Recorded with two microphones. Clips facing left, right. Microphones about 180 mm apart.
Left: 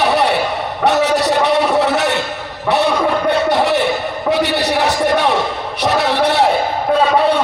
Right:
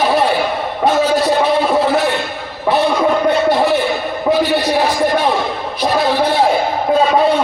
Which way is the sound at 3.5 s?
70° left (ahead or behind).